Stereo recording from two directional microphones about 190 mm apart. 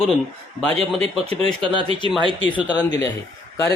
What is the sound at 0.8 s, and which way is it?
Speech, 30° right (ahead or behind).